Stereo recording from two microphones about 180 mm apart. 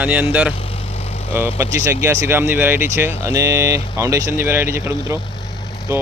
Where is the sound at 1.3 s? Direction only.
15° right (ahead or behind).